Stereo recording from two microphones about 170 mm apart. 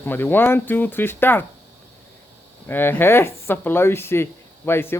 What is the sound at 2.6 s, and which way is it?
A man's voice, 10° left (ahead or behind).